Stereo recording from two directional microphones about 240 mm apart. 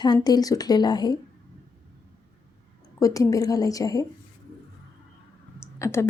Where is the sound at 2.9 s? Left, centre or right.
Centre.